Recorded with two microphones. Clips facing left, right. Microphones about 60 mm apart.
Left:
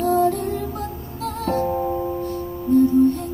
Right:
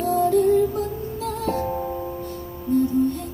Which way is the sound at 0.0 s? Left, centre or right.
Left.